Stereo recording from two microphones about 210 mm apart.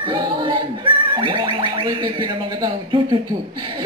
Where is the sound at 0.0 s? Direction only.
20° right (ahead or behind).